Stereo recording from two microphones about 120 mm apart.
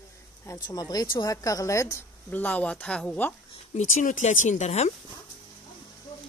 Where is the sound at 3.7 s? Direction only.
80° left.